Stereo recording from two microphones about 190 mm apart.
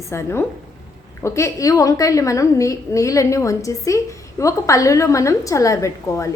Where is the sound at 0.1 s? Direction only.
15° left (ahead or behind).